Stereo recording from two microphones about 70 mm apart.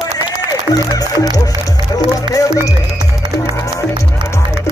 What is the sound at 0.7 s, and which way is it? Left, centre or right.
Speech, left.